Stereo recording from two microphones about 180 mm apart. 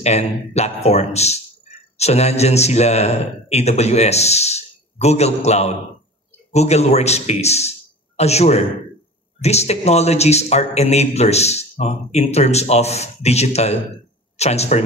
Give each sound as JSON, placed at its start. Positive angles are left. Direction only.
{"t": 0.0, "sound": "speech", "side_deg": 35}